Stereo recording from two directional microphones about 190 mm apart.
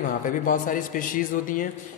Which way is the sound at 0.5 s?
45° left (ahead or behind).